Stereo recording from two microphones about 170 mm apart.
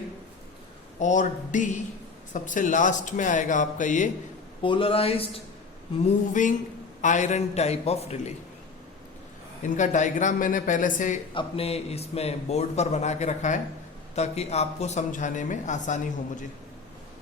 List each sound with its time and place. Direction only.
0.9 s speech: 45° left (ahead or behind)
4.6 s a man's voice: 30° left (ahead or behind)
6.4 s a man's voice: 45° left (ahead or behind)
9.6 s speech: 45° left (ahead or behind)
11.3 s a man's voice: 35° left (ahead or behind)